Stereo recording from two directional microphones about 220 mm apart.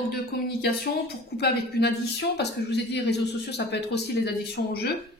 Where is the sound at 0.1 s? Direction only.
45° left (ahead or behind).